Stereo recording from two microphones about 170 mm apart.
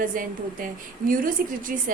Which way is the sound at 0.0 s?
55° right (ahead or behind).